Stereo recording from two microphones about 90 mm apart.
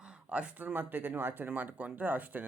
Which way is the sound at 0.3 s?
15° right (ahead or behind).